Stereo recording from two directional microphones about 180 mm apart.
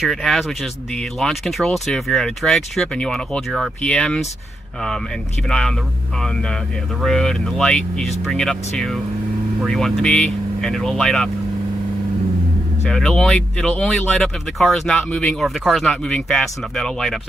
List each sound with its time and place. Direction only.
0.0 s speech: centre (ahead or behind)
5.5 s speech: 5° left (ahead or behind)
12.9 s speech: 5° left (ahead or behind)